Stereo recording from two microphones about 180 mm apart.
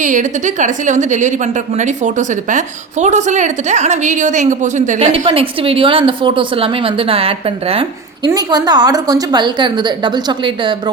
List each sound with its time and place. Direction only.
0.0 s a woman's voice: 45° right (ahead or behind)
8.3 s a woman's voice: 20° right (ahead or behind)